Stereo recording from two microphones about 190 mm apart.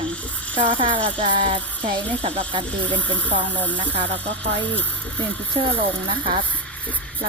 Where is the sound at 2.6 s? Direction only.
5° left (ahead or behind).